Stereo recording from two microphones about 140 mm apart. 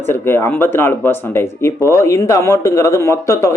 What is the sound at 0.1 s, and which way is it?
Speech, 15° left (ahead or behind).